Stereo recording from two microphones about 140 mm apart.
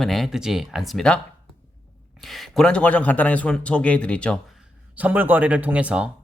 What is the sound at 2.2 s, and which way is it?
Speech, centre (ahead or behind).